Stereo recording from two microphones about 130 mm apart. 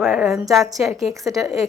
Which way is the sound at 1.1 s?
25° right (ahead or behind).